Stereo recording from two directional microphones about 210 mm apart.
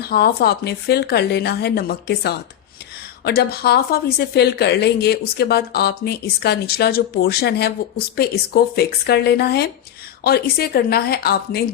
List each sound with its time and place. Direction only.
0.0 s a woman's voice: 50° left (ahead or behind)
8.7 s a woman's voice: 50° left (ahead or behind)